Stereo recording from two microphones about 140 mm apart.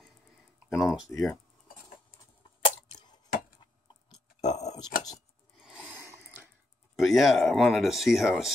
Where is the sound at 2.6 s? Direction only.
35° left (ahead or behind).